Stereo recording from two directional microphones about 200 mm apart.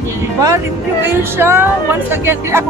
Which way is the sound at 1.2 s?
10° right (ahead or behind).